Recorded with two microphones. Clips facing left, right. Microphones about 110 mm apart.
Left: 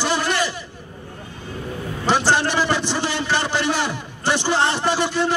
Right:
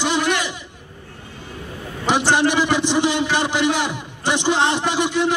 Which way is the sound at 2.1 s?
15° right (ahead or behind).